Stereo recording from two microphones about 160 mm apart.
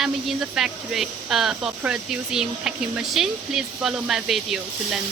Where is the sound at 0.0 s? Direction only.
5° right (ahead or behind).